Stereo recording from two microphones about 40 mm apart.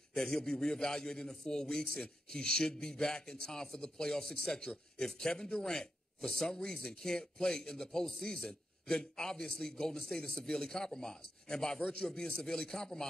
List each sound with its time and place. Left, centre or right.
0.1 s a man's voice: centre